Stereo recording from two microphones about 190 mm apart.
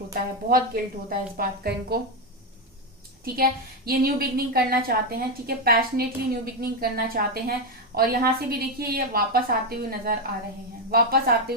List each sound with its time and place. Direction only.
0.1 s a woman's voice: 50° right (ahead or behind)
3.3 s a woman's voice: 50° right (ahead or behind)